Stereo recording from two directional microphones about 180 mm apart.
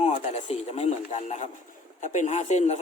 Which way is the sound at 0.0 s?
40° left (ahead or behind).